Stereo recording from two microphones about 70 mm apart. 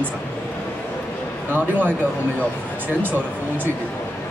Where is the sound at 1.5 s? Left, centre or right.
Right.